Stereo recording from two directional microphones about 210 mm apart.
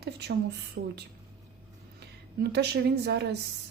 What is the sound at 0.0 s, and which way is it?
Speech, 50° right (ahead or behind).